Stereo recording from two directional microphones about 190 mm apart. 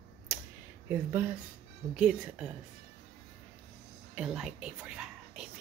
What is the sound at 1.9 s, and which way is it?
Speech, 5° right (ahead or behind).